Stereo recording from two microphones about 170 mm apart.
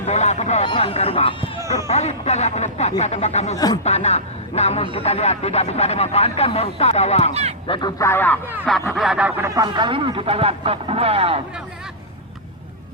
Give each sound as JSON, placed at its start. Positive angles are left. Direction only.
{"t": 0.0, "sound": "speech", "side_deg": 40}
{"t": 7.7, "sound": "speech", "side_deg": 25}
{"t": 8.9, "sound": "a sound", "side_deg": 0}
{"t": 9.6, "sound": "speech", "side_deg": -25}